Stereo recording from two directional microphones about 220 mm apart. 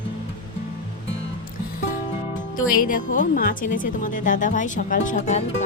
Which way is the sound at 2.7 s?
40° left (ahead or behind).